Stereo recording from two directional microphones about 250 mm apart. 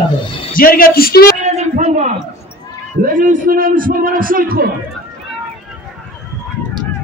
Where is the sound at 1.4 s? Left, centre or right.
Right.